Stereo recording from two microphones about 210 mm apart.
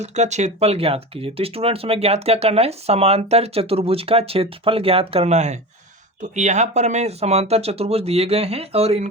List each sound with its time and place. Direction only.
0.0 s speech: 35° right (ahead or behind)